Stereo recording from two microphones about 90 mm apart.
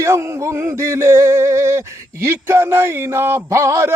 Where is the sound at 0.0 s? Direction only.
30° right (ahead or behind).